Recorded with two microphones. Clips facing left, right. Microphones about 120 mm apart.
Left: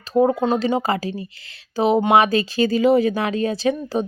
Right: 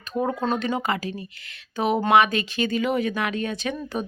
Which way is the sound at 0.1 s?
25° left (ahead or behind).